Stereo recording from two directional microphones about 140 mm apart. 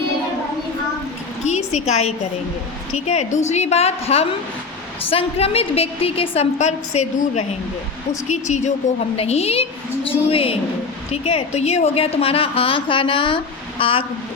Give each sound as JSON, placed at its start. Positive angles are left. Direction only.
{"t": 1.5, "sound": "a sound", "side_deg": 50}
{"t": 3.1, "sound": "a woman's voice", "side_deg": 55}
{"t": 9.1, "sound": "a woman's voice", "side_deg": 45}